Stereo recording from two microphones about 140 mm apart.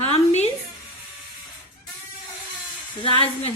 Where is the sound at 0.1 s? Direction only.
50° left (ahead or behind).